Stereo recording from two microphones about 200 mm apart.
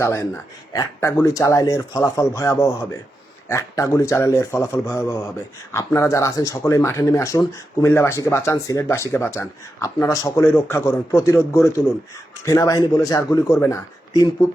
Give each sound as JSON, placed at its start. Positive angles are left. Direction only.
{"t": 0.0, "sound": "speech", "side_deg": 15}